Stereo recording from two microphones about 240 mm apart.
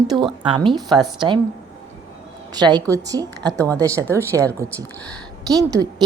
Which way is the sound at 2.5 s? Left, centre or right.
Centre.